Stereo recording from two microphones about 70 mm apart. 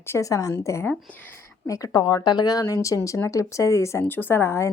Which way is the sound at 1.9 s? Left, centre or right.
Left.